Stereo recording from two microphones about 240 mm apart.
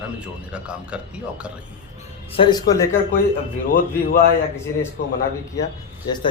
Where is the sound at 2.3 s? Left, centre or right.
Centre.